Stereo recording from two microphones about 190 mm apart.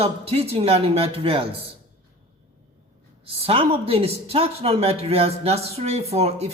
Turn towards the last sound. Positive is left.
turn(degrees=-35)  # may be behind; listen again after turning